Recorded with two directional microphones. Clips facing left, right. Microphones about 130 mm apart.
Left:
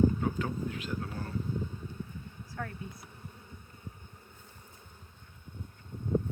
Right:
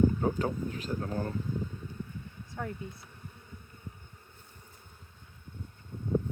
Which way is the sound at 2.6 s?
15° right (ahead or behind).